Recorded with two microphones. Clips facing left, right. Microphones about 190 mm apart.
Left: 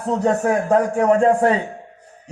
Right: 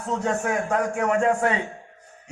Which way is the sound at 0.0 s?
35° left (ahead or behind).